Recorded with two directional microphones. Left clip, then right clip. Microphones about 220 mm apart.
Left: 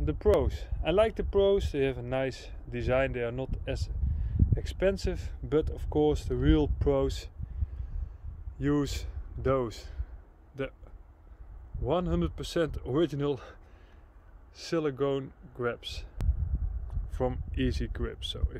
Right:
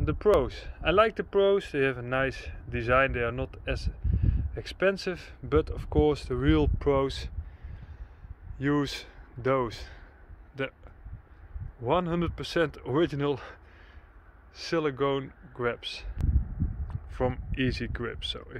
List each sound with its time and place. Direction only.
0.0 s speech: 5° left (ahead or behind)
8.5 s a man's voice: 15° left (ahead or behind)
11.8 s speech: 10° left (ahead or behind)